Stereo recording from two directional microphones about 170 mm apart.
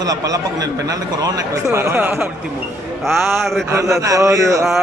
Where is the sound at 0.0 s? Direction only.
20° right (ahead or behind).